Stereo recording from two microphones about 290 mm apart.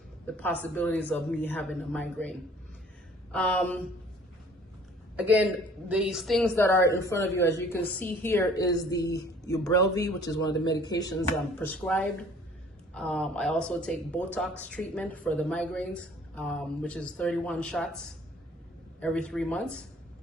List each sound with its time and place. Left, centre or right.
0.6 s speech: centre
3.3 s speech: centre
5.1 s speech: centre
9.0 s a woman's voice: left
9.4 s speech: centre